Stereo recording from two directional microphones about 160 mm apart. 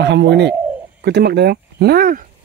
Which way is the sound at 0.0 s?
90° right.